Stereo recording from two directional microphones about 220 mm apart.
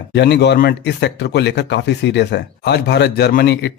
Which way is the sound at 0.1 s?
50° left (ahead or behind).